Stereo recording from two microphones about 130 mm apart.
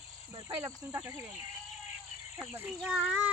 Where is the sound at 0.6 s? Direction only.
20° right (ahead or behind).